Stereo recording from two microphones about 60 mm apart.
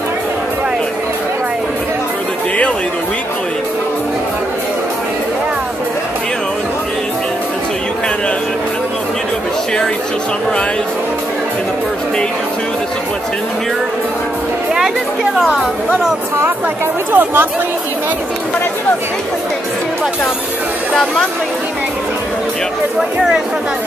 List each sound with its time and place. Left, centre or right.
17.1 s speech: right
20.9 s speech: centre
22.9 s speech: centre